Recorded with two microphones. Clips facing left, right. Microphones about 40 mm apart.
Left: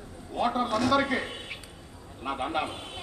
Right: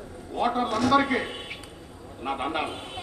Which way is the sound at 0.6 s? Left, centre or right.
Right.